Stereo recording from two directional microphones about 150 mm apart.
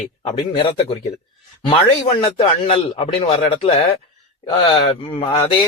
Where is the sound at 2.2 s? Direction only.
40° left (ahead or behind).